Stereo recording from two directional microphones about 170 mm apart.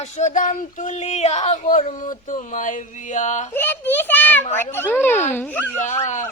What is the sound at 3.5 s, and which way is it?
A child's voice, 10° left (ahead or behind).